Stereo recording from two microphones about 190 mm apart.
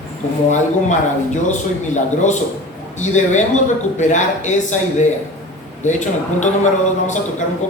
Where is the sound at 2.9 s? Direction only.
40° left (ahead or behind).